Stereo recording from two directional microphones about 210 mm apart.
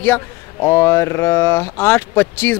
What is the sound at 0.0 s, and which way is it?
Speech, 10° left (ahead or behind).